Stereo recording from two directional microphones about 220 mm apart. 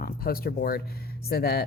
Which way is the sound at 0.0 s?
40° left (ahead or behind).